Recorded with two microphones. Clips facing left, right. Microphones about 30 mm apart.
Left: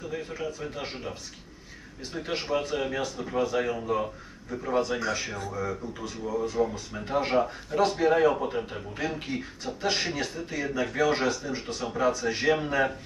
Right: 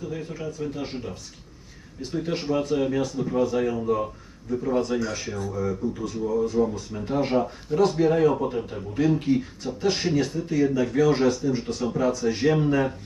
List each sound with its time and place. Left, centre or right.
0.1 s speech: centre
8.1 s speech: left
9.1 s speech: centre